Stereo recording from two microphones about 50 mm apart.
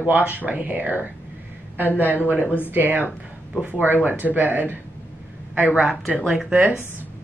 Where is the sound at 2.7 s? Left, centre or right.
Right.